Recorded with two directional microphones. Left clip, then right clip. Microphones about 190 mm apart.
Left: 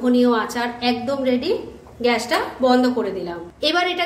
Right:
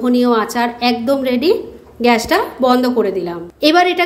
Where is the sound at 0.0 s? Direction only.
30° right (ahead or behind).